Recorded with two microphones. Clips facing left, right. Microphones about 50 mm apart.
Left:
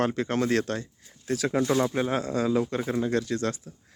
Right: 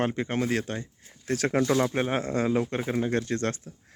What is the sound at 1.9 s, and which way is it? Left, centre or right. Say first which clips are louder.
Speech: even; right.